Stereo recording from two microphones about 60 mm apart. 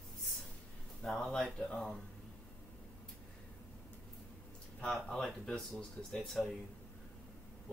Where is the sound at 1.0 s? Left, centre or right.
Centre.